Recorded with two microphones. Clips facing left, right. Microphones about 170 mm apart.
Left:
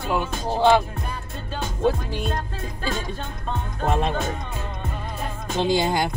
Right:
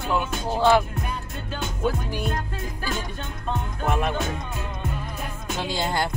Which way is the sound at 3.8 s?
25° left (ahead or behind).